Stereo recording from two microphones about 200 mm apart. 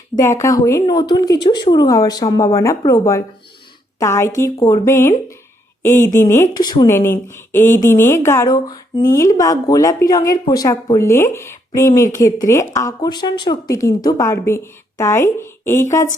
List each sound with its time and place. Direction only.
0.2 s a woman's voice: 15° left (ahead or behind)